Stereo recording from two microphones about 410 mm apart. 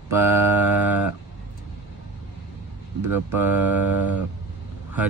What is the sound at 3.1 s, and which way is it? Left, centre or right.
Speech, centre.